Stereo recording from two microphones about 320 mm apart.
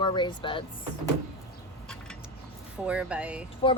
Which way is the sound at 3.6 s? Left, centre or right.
Centre.